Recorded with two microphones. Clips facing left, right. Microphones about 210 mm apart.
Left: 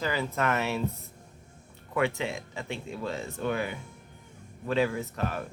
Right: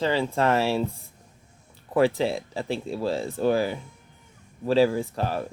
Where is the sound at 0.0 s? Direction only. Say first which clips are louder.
Right 6 dB; 30° right (ahead or behind).